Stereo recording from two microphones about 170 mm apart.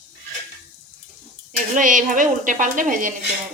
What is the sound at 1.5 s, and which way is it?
Speech, 50° right (ahead or behind).